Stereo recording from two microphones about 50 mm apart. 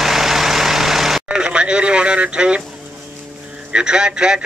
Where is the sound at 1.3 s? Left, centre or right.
Centre.